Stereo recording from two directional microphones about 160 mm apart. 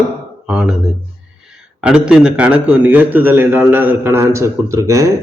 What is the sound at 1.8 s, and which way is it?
A man's voice, 5° right (ahead or behind).